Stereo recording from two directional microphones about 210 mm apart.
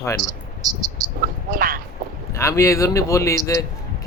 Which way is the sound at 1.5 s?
40° right (ahead or behind).